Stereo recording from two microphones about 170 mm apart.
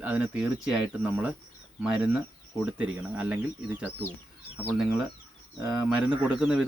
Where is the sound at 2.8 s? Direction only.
5° right (ahead or behind).